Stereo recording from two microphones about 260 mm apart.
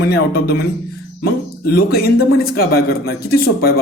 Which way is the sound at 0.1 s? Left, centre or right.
Left.